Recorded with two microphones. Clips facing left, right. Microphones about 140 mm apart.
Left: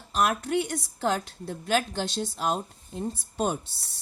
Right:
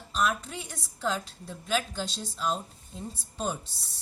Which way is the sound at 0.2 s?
70° left (ahead or behind).